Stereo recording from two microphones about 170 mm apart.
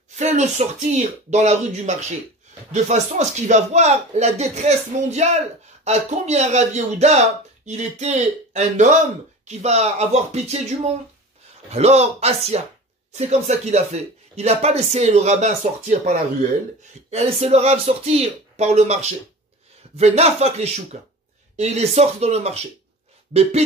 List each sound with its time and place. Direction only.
0.1 s speech: 45° right (ahead or behind)